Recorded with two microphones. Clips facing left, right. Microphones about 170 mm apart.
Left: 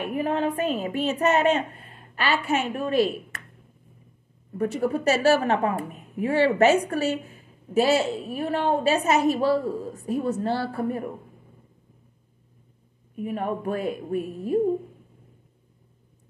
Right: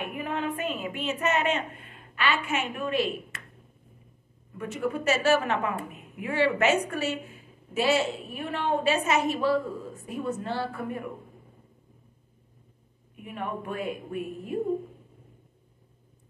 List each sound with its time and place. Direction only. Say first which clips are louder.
0.0 s a woman's voice: left 6 dB; 35° left (ahead or behind)
4.6 s a woman's voice: left 6 dB; 35° left (ahead or behind)
13.1 s a woman's voice: left 7 dB; 40° left (ahead or behind)